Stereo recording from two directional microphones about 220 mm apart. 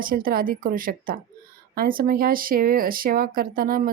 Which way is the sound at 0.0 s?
40° right (ahead or behind).